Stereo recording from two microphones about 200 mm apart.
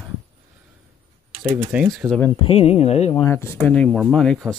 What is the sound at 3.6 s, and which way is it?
Speech, 5° left (ahead or behind).